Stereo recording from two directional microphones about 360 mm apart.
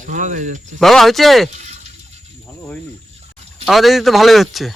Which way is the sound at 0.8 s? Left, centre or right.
Centre.